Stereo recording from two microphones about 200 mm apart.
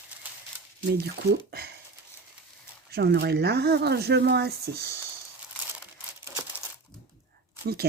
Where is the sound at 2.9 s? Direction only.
55° right (ahead or behind).